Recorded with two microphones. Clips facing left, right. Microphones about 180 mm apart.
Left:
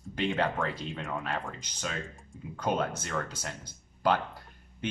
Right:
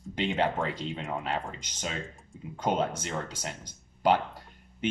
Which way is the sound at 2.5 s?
25° right (ahead or behind).